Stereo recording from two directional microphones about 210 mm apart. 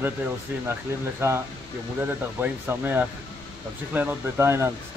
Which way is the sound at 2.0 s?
10° right (ahead or behind).